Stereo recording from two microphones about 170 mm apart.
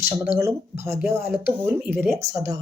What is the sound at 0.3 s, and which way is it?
Speech, 15° right (ahead or behind).